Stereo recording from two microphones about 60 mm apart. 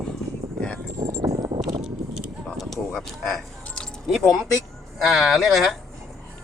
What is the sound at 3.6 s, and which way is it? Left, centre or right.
Keys jangling, centre.